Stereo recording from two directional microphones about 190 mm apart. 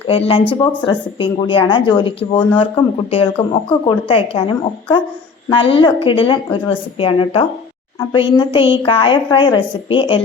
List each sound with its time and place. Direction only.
0.1 s a woman's voice: 30° left (ahead or behind)